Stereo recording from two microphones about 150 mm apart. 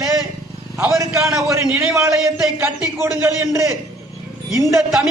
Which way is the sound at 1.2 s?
Centre (ahead or behind).